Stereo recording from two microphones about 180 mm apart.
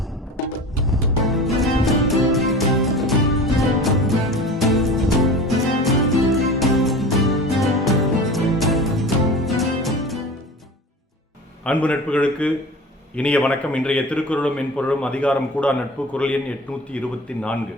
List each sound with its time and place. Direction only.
0.9 s music: centre (ahead or behind)
11.6 s a man's voice: 5° left (ahead or behind)